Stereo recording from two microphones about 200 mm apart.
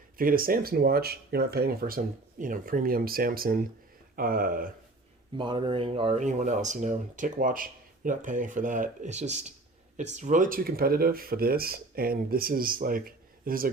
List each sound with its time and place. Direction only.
0.2 s speech: 45° right (ahead or behind)
5.4 s speech: 25° right (ahead or behind); by 13.7 s 45° right (ahead or behind)